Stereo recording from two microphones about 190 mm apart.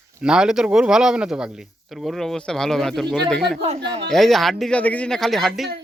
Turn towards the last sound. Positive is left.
turn(degrees=0)  # may be behind; listen again after turning